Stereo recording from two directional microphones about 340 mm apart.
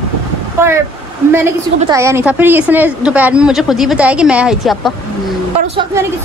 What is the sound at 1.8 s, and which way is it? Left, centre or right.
A woman's voice, centre.